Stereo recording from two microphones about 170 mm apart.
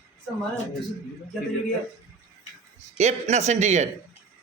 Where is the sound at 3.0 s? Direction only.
40° right (ahead or behind).